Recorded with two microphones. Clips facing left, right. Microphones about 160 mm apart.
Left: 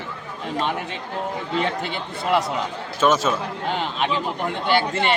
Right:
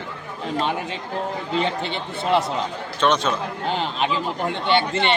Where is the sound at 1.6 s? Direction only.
30° right (ahead or behind).